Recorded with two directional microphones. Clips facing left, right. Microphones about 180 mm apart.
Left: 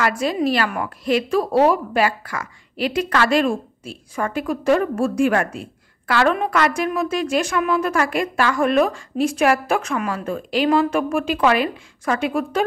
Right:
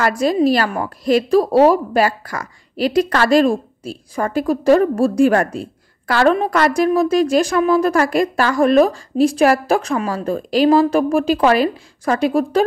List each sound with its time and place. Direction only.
0.0 s a woman's voice: 40° right (ahead or behind)